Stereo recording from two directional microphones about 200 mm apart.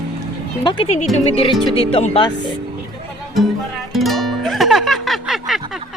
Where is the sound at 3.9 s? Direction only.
Centre (ahead or behind).